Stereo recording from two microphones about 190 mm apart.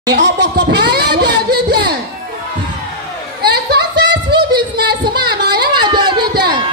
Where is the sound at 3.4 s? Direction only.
60° right (ahead or behind).